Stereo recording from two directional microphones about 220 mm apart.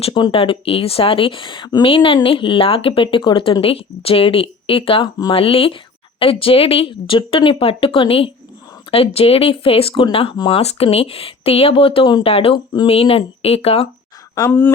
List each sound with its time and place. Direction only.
0.0 s speech: 25° left (ahead or behind)
14.3 s speech: 10° left (ahead or behind)